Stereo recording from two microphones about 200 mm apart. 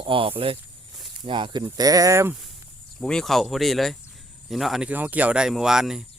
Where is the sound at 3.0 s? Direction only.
Centre (ahead or behind).